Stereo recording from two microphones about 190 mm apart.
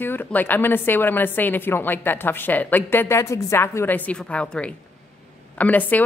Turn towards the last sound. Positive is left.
turn(degrees=10)  # may be behind; listen again after turning